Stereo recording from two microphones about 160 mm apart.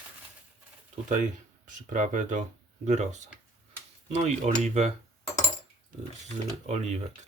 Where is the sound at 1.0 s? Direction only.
55° right (ahead or behind).